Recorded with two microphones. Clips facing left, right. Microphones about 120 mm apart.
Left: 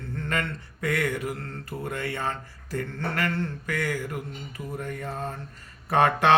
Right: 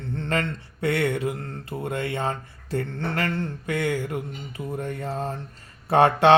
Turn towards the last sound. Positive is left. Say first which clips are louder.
# right 4 dB
turn(degrees=-30)  # may be behind; listen again after turning